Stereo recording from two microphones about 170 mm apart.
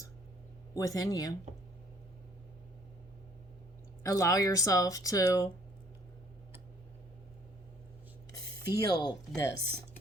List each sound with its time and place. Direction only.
0.7 s speech: 20° left (ahead or behind)
4.0 s speech: 20° left (ahead or behind)
8.7 s speech: 25° left (ahead or behind)